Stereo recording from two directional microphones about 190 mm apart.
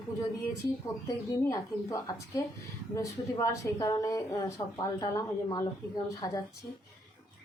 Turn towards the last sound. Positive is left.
turn(degrees=15)  # may be behind; listen again after turning